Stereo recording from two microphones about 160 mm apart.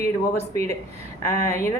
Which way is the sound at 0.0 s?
20° left (ahead or behind).